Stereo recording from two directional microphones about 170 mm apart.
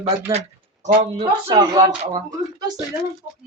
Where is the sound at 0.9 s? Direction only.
30° right (ahead or behind).